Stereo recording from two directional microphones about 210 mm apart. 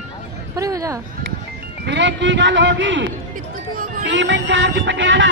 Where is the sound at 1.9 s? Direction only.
60° right (ahead or behind).